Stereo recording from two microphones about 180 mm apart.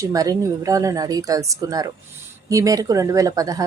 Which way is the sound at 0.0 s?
20° right (ahead or behind).